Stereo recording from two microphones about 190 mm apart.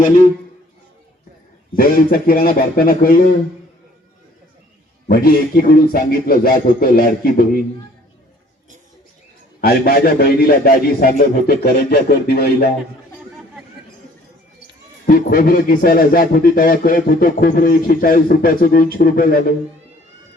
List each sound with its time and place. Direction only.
1.7 s speech: 50° left (ahead or behind)
5.0 s speech: 50° left (ahead or behind)
9.6 s speech: 55° left (ahead or behind)
15.0 s speech: 50° left (ahead or behind)